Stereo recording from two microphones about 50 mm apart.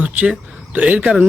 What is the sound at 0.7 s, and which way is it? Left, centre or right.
Speech, right.